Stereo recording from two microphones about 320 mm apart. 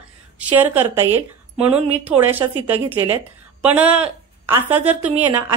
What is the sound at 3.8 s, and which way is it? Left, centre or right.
Speech, centre.